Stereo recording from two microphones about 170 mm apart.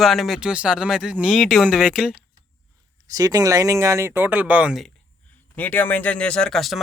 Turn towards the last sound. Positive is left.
turn(degrees=0)  # may be behind; listen again after turning